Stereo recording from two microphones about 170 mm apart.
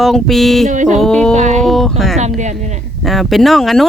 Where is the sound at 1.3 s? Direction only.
45° right (ahead or behind).